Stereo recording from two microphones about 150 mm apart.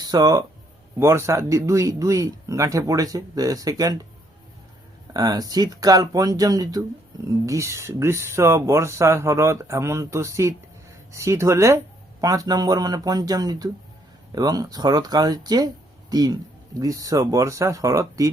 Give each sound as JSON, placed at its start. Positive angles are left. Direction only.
{"t": 0.0, "sound": "speech", "side_deg": -25}
{"t": 5.1, "sound": "speech", "side_deg": -25}